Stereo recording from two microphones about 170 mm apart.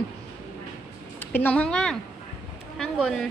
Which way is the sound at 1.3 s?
10° left (ahead or behind).